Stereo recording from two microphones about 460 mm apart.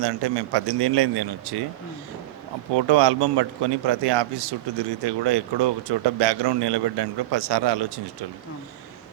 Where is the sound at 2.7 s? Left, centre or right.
Right.